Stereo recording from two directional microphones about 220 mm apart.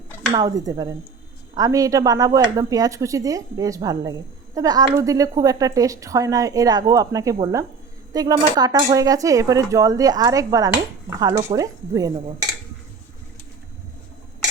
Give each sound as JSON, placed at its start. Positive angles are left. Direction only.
{"t": 0.3, "sound": "speech", "side_deg": -15}